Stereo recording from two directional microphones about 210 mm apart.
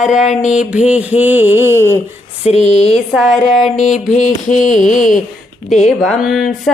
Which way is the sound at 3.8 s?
35° left (ahead or behind).